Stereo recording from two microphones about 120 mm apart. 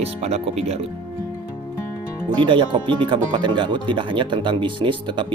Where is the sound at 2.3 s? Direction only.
40° right (ahead or behind).